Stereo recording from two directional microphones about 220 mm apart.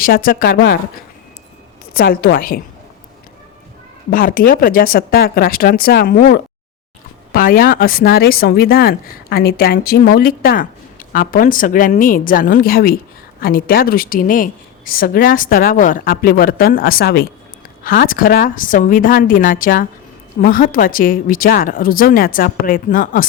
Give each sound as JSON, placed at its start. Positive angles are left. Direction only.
{"t": 0.0, "sound": "speech", "side_deg": 40}
{"t": 1.9, "sound": "speech", "side_deg": 45}
{"t": 4.1, "sound": "speech", "side_deg": 40}